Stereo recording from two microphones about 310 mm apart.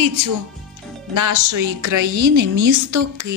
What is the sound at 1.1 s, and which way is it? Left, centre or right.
A woman's voice, right.